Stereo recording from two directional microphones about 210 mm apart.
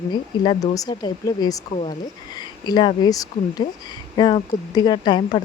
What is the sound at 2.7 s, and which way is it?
Speech, 20° left (ahead or behind).